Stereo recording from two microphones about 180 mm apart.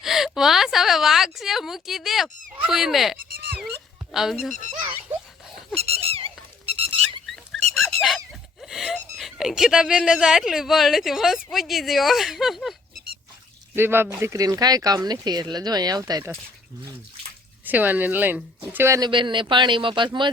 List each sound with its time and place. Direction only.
0.0 s a sound: centre (ahead or behind)
2.6 s fowl: centre (ahead or behind)
3.2 s fowl: 55° right (ahead or behind)
4.1 s speech: centre (ahead or behind)
5.7 s a sound: 35° right (ahead or behind)
8.0 s a sound: centre (ahead or behind)
11.5 s speech: centre (ahead or behind)
13.7 s speech: 10° right (ahead or behind)
17.7 s speech: 10° right (ahead or behind); by 20.1 s 25° right (ahead or behind)